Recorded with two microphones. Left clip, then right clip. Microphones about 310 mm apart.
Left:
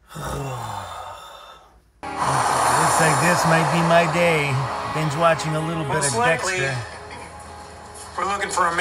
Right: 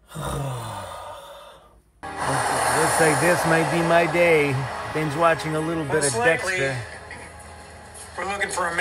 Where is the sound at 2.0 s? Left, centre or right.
Centre.